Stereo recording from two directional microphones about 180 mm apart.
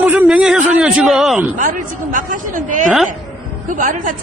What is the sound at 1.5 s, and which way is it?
Speech, 45° right (ahead or behind).